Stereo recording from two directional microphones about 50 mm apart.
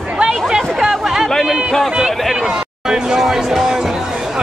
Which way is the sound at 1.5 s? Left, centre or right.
Centre.